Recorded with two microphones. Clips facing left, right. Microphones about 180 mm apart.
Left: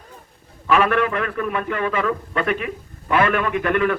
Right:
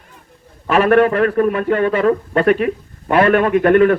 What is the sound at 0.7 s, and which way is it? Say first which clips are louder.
A man's voice: right 6 dB; 40° right (ahead or behind).